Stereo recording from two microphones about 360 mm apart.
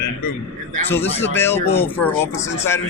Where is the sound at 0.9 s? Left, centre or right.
Centre.